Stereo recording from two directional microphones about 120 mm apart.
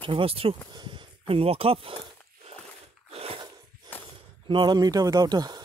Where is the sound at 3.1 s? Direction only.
55° right (ahead or behind).